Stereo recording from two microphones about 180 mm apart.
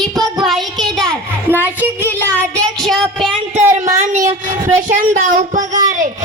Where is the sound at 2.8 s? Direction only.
Centre (ahead or behind).